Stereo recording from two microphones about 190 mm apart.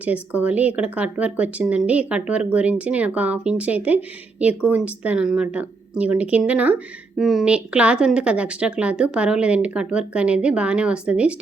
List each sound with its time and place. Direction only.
0.0 s speech: 10° right (ahead or behind)